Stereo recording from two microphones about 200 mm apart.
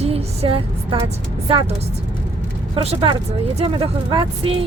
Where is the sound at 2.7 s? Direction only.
30° right (ahead or behind).